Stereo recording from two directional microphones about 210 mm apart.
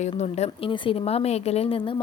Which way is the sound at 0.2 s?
30° left (ahead or behind).